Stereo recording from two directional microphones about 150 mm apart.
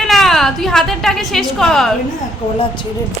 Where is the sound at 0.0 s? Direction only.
Centre (ahead or behind).